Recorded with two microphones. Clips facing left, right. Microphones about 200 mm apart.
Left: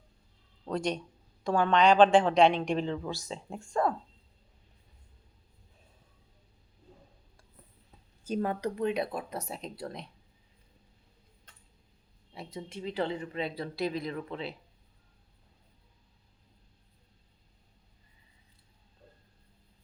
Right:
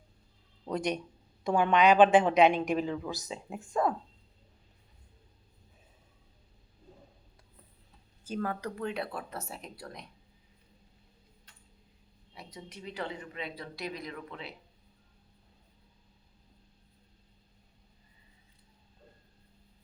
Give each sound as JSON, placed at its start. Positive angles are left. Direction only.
{"t": 1.5, "sound": "a woman's voice", "side_deg": -10}
{"t": 8.3, "sound": "speech", "side_deg": 25}
{"t": 12.3, "sound": "speech", "side_deg": 30}